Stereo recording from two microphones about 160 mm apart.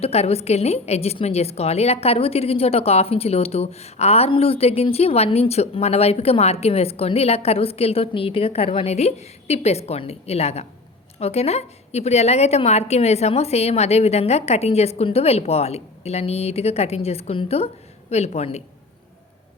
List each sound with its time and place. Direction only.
0.0 s a woman's voice: 40° left (ahead or behind)